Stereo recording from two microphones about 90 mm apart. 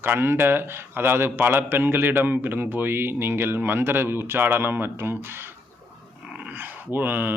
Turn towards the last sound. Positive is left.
turn(degrees=-20)  # may be behind; listen again after turning